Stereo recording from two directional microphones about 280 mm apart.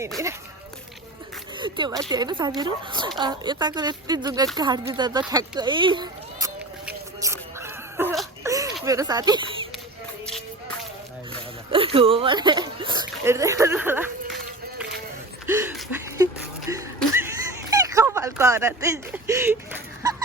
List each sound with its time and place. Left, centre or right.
0.2 s speech: centre
1.5 s speech: centre
6.8 s dog: centre
8.4 s a sound: centre
8.8 s speech: centre
11.7 s speech: centre
15.4 s a sound: centre